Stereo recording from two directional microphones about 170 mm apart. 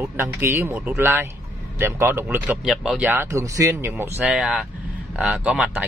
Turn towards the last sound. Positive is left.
turn(degrees=-5)  # may be behind; listen again after turning